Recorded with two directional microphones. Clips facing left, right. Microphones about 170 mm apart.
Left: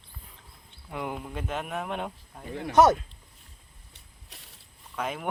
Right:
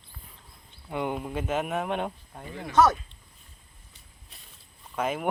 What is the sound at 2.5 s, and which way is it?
Speech, 55° left (ahead or behind).